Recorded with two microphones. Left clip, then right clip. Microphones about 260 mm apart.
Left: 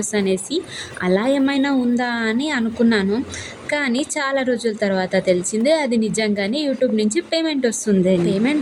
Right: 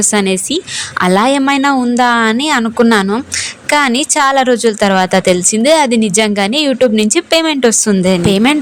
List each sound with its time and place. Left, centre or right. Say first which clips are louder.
0.1 s a woman's voice: right 7 dB; right